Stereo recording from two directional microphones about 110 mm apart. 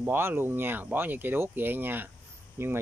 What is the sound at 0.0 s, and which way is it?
Speech, 20° right (ahead or behind).